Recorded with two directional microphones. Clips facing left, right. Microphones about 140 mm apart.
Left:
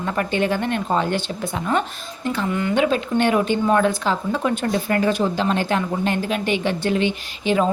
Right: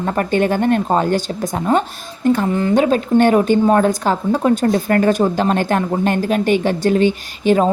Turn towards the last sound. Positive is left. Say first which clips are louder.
# right 5 dB
turn(degrees=-40)  # may be behind; listen again after turning